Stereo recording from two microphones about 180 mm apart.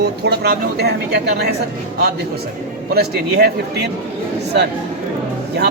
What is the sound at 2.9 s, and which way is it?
Speech, 60° right (ahead or behind).